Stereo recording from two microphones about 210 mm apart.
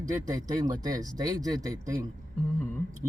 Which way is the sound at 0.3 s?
20° right (ahead or behind).